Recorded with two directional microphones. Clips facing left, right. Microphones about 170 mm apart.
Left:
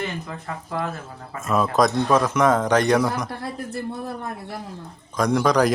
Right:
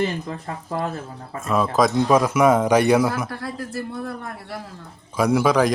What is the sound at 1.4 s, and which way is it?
Speech, centre (ahead or behind).